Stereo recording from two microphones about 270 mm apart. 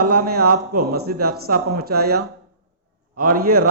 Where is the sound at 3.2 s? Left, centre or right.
Right.